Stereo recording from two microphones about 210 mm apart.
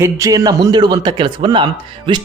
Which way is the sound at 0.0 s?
15° right (ahead or behind).